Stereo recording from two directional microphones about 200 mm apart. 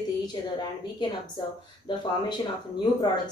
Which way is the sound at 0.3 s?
20° left (ahead or behind).